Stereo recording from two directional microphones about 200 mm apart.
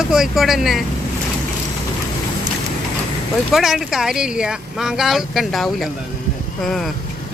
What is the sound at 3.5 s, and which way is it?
Speech, centre (ahead or behind).